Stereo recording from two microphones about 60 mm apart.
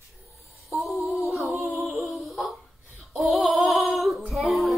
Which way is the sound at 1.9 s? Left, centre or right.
Centre.